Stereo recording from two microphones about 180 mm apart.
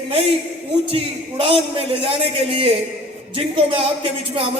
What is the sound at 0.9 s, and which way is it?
A man's voice, 30° right (ahead or behind).